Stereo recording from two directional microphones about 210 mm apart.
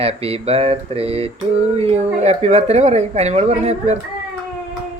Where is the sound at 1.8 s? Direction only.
30° right (ahead or behind).